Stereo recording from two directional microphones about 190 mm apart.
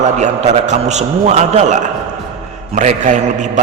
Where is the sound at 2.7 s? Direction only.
40° right (ahead or behind).